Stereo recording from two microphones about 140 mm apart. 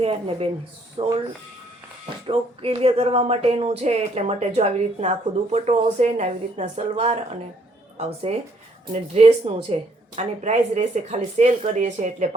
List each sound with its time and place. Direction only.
0.0 s speech: 45° right (ahead or behind)
2.2 s speech: 40° right (ahead or behind); by 12.3 s 60° right (ahead or behind)